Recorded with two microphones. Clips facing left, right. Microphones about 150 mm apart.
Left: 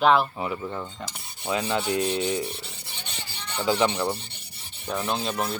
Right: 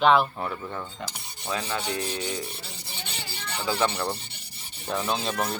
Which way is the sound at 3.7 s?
20° left (ahead or behind).